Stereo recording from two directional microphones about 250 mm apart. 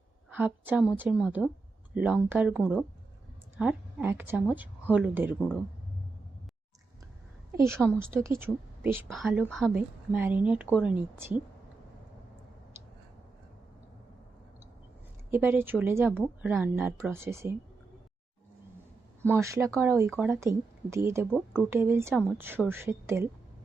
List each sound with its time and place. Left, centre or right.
0.3 s a woman's voice: centre
7.5 s a woman's voice: centre
15.3 s a woman's voice: centre
19.3 s a woman's voice: centre